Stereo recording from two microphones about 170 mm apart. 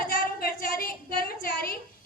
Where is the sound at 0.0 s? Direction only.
55° left (ahead or behind).